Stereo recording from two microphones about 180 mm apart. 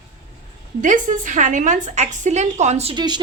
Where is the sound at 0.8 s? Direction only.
45° right (ahead or behind).